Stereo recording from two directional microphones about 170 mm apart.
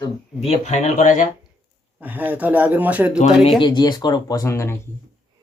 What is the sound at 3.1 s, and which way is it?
Speech, 40° left (ahead or behind).